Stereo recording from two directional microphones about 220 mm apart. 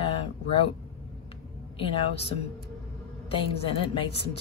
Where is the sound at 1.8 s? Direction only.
25° left (ahead or behind).